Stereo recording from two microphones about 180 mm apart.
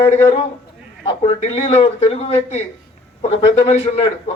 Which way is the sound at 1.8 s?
35° left (ahead or behind).